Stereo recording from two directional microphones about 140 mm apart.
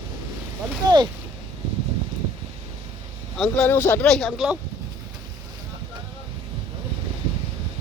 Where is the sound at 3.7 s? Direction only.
15° left (ahead or behind).